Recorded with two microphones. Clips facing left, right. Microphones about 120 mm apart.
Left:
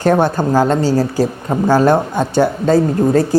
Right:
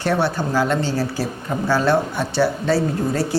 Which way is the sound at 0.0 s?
45° left (ahead or behind).